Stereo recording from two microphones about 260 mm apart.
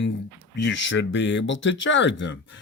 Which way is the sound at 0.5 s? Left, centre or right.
Left.